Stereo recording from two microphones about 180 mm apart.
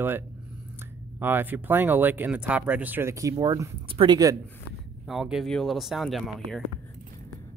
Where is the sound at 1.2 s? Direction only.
10° right (ahead or behind).